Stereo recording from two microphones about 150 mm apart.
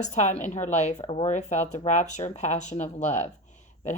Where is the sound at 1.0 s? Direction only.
40° left (ahead or behind).